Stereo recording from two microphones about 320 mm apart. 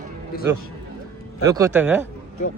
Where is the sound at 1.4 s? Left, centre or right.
Centre.